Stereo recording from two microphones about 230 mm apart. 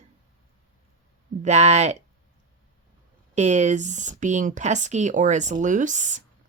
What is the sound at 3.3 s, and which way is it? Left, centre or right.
Speech, right.